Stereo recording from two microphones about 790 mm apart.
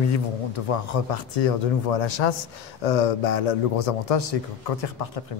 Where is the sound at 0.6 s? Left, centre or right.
Left.